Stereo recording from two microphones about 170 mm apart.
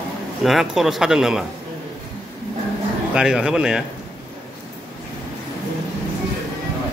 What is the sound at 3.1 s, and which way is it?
Speech, 5° right (ahead or behind).